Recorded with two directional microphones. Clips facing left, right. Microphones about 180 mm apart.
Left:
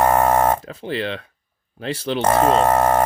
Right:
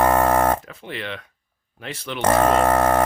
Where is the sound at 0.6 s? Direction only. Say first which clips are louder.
Left 7 dB; 30° left (ahead or behind).